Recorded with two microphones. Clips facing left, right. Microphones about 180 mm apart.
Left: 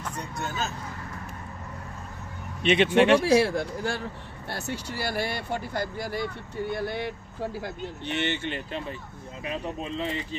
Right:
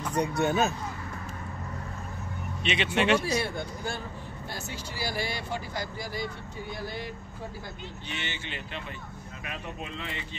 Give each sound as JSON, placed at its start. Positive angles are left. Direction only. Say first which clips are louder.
{"t": 0.4, "sound": "speech", "louder": "right 6 dB", "side_deg": -60}
{"t": 2.6, "sound": "speech", "louder": "left 7 dB", "side_deg": 50}
{"t": 3.3, "sound": "speech", "louder": "left 8 dB", "side_deg": 90}
{"t": 4.5, "sound": "speech", "louder": "left 7 dB", "side_deg": 65}
{"t": 9.4, "sound": "speech", "louder": "left 7 dB", "side_deg": 30}